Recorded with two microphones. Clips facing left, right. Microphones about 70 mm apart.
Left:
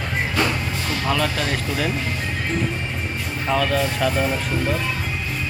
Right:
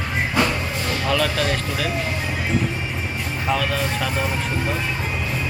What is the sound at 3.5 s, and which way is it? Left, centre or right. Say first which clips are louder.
Speech: left 2 dB; centre.